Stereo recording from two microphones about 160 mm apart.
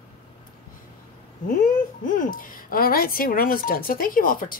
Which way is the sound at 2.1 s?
60° left (ahead or behind).